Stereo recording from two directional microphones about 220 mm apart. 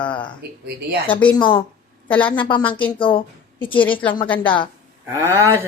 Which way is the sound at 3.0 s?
25° left (ahead or behind).